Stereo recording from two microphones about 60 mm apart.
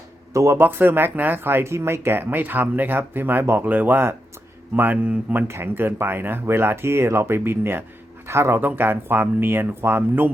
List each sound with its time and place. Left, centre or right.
0.3 s speech: right
0.6 s speech: right
1.7 s speech: right
2.1 s speech: right
5.5 s speech: right
8.6 s speech: right